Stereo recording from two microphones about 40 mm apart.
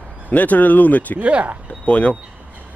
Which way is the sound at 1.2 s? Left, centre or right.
Right.